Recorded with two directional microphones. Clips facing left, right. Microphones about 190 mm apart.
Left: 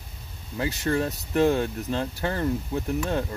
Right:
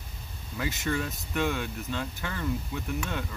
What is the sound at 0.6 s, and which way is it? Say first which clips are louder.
Speech: left 5 dB; 35° left (ahead or behind).